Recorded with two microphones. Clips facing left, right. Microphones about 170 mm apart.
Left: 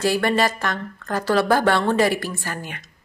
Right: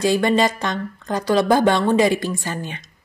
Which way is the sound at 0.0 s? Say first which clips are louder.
Right 3 dB; 20° right (ahead or behind).